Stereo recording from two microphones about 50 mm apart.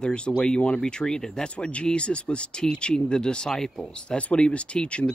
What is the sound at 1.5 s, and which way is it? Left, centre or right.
Speech, left.